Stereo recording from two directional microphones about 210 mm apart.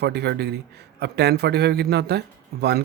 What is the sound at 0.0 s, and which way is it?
A man's voice, 50° right (ahead or behind).